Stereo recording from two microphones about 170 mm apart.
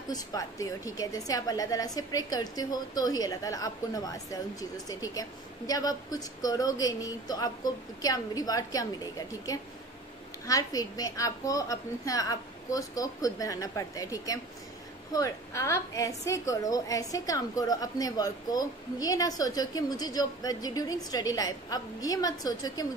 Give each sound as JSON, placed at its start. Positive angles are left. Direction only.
{"t": 0.1, "sound": "a woman's voice", "side_deg": 20}